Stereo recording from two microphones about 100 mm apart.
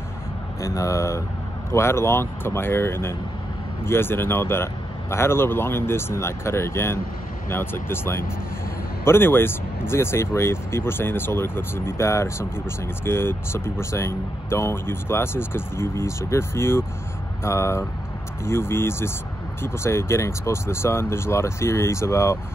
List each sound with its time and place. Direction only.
0.6 s speech: 30° left (ahead or behind)